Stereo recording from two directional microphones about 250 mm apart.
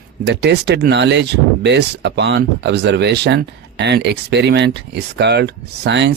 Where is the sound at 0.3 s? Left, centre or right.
Right.